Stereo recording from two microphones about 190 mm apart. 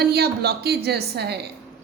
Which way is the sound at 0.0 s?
55° right (ahead or behind).